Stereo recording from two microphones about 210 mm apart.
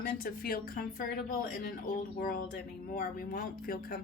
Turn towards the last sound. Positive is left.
turn(degrees=45)  # may be behind; listen again after turning